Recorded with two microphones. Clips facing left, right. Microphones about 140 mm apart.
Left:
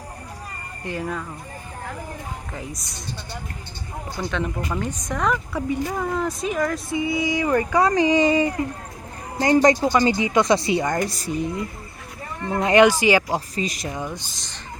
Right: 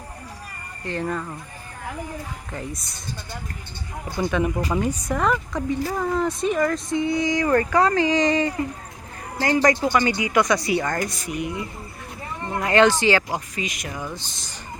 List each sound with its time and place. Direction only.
2.5 s a woman's voice: centre (ahead or behind)
4.2 s speech: 10° right (ahead or behind)
5.5 s speech: 15° left (ahead or behind)
5.9 s speech: centre (ahead or behind)
9.4 s speech: 25° left (ahead or behind)
11.0 s speech: 35° left (ahead or behind)
12.6 s speech: 15° left (ahead or behind)
13.6 s speech: 35° left (ahead or behind); by 14.3 s 20° left (ahead or behind)
14.3 s speech: 5° right (ahead or behind)